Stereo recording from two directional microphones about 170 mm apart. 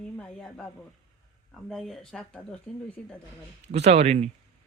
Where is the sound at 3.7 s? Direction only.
40° right (ahead or behind).